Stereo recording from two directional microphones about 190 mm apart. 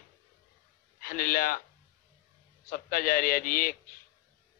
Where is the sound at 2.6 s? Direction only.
45° left (ahead or behind).